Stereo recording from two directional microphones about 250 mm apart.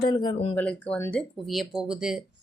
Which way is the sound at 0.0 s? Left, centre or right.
Centre.